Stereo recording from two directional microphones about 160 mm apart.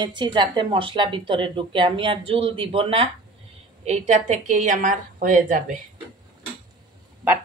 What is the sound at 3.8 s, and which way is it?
A woman's voice, 45° right (ahead or behind).